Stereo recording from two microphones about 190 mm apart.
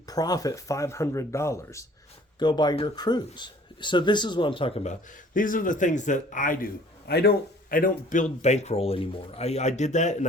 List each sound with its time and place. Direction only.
0.0 s speech: 20° left (ahead or behind); by 6.7 s 45° left (ahead or behind)
7.1 s speech: 55° left (ahead or behind); by 10.2 s 40° left (ahead or behind)